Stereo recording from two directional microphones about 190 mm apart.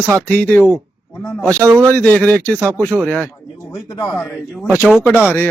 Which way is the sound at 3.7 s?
20° left (ahead or behind).